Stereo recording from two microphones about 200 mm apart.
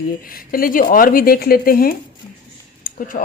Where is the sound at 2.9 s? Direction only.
45° left (ahead or behind).